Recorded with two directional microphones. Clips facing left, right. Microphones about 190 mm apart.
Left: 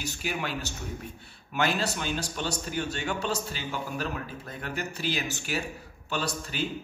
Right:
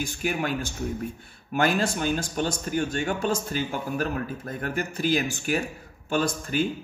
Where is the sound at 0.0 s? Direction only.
50° right (ahead or behind).